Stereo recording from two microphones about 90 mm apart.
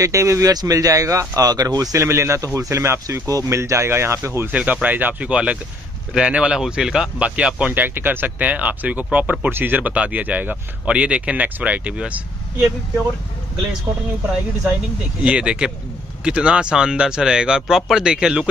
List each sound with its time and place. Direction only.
0.0 s speech: 35° right (ahead or behind)
4.5 s speech: 15° right (ahead or behind)
15.2 s speech: 10° right (ahead or behind)